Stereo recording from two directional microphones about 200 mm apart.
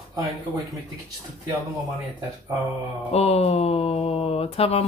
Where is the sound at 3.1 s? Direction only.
30° left (ahead or behind).